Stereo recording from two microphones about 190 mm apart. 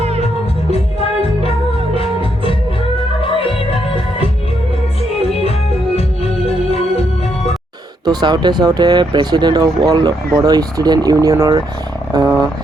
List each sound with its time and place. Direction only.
2.0 s music: 30° left (ahead or behind)
6.0 s music: 30° left (ahead or behind)
8.0 s speech: 20° right (ahead or behind)